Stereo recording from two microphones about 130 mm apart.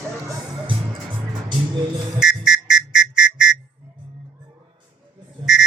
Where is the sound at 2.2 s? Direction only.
5° right (ahead or behind).